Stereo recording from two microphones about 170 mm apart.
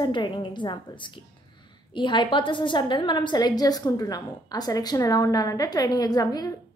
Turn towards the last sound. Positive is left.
turn(degrees=20)  # may be behind; listen again after turning